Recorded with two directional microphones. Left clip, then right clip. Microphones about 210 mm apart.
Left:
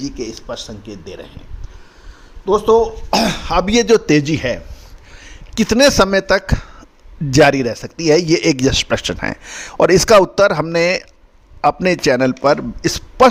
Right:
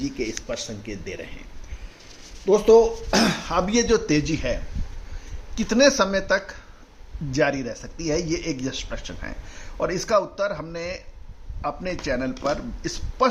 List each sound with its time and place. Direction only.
0.0 s speech: 25° left (ahead or behind)
2.8 s speech: 40° left (ahead or behind)